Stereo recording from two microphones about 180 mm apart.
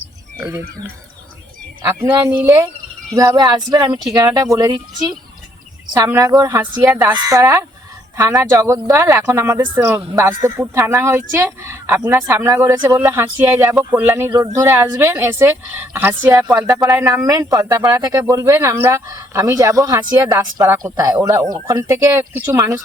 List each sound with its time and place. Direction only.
0.3 s speech: 15° right (ahead or behind)
1.8 s speech: 15° right (ahead or behind)